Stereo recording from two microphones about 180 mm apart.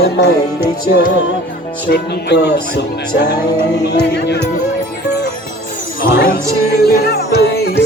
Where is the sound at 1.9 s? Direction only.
65° left (ahead or behind).